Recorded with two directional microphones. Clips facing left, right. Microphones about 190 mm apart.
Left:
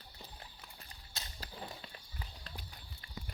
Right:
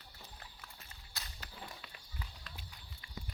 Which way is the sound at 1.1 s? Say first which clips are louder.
Left 3 dB; 30° left (ahead or behind).